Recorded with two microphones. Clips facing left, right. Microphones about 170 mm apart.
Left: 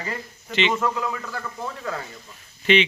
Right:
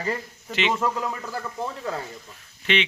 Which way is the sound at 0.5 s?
5° right (ahead or behind).